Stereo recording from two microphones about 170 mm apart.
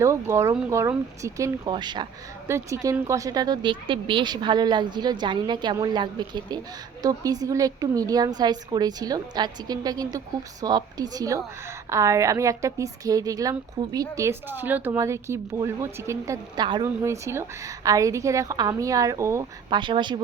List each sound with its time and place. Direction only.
0.0 s a woman's voice: 15° right (ahead or behind)